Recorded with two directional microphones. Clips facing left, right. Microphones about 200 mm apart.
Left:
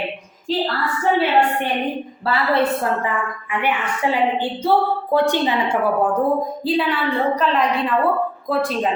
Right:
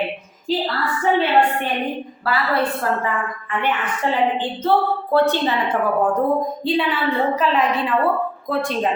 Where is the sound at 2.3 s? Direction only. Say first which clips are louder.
Even; 25° left (ahead or behind).